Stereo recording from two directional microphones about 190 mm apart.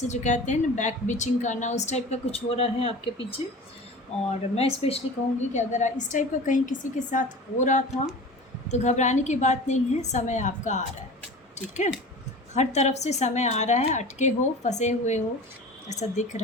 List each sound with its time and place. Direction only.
0.0 s a woman's voice: 40° left (ahead or behind)
11.8 s a woman's voice: 40° left (ahead or behind)